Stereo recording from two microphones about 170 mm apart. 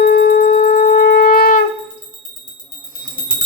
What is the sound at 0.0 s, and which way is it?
Wind instrument, 65° left (ahead or behind).